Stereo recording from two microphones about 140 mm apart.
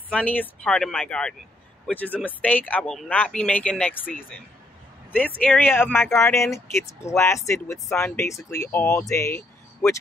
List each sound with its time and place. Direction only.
0.1 s speech: 10° left (ahead or behind)
5.4 s speech: 10° left (ahead or behind)